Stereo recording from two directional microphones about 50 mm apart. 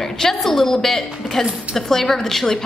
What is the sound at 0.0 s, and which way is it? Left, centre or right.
A woman's voice, centre.